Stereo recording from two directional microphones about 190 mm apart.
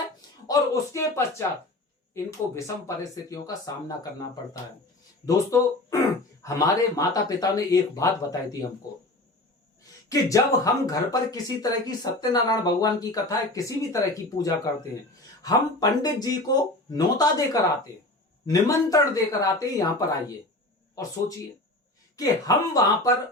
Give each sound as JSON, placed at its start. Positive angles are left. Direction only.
{"t": 0.4, "sound": "speech", "side_deg": 20}
{"t": 2.6, "sound": "speech", "side_deg": 15}
{"t": 10.1, "sound": "speech", "side_deg": 15}
{"t": 22.1, "sound": "speech", "side_deg": 20}